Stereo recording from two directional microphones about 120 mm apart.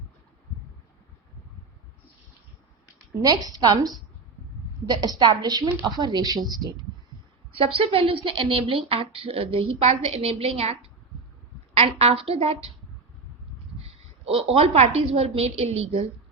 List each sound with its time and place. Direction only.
3.2 s a woman's voice: 30° right (ahead or behind)
7.5 s a woman's voice: 50° right (ahead or behind)
11.9 s a woman's voice: 55° right (ahead or behind)
13.8 s a woman's voice: 55° right (ahead or behind)